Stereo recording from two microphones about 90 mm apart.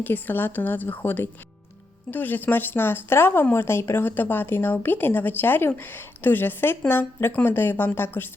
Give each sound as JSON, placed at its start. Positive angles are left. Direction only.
{"t": 0.0, "sound": "speech", "side_deg": 20}